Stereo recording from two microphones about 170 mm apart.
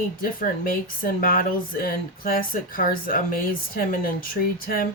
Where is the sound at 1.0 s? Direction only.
55° left (ahead or behind).